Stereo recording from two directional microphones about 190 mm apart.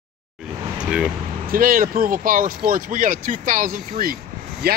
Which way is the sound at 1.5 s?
50° right (ahead or behind).